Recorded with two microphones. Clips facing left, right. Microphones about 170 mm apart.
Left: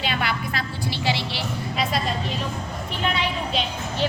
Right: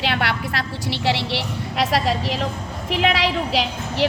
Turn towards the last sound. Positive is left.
turn(degrees=-80)